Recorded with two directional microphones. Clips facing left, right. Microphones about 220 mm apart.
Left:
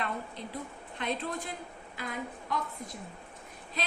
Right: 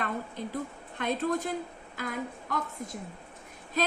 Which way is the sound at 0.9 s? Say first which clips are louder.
Right 5 dB; 45° right (ahead or behind).